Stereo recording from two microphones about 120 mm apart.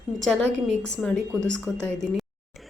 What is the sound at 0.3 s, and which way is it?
Speech, 5° left (ahead or behind).